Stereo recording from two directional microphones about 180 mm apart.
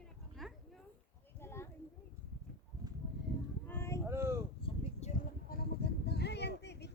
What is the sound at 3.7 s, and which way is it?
Boat, 15° left (ahead or behind).